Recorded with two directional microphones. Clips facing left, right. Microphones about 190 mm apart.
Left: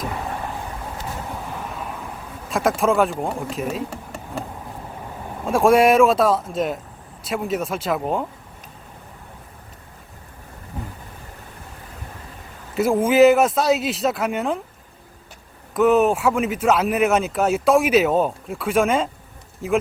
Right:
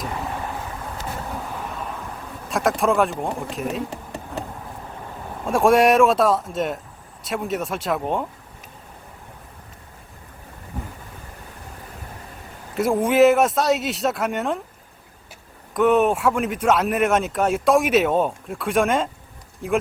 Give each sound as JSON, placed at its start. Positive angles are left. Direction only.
{"t": 1.7, "sound": "vehicle", "side_deg": 5}
{"t": 2.5, "sound": "speech", "side_deg": 0}
{"t": 3.8, "sound": "a sound", "side_deg": -20}
{"t": 5.5, "sound": "speech", "side_deg": 0}
{"t": 12.7, "sound": "speech", "side_deg": 0}
{"t": 15.7, "sound": "speech", "side_deg": 0}